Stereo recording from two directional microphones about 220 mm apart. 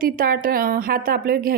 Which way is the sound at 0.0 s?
40° right (ahead or behind).